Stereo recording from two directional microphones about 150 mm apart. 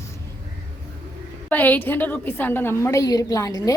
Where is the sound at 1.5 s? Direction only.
10° left (ahead or behind).